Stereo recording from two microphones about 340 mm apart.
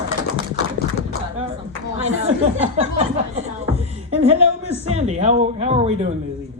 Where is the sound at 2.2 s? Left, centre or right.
Centre.